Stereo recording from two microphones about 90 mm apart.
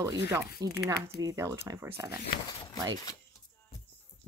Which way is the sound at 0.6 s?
45° right (ahead or behind).